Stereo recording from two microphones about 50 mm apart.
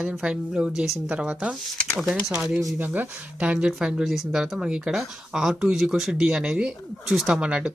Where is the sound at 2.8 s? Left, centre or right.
Right.